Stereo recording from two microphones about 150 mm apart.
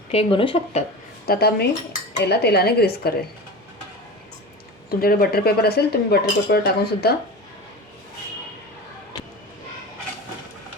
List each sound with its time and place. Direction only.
0.1 s speech: 40° left (ahead or behind)
1.3 s speech: 90° left
4.9 s speech: 90° left